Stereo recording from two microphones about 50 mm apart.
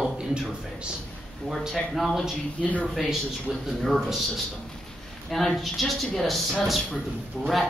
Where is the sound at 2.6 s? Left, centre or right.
Left.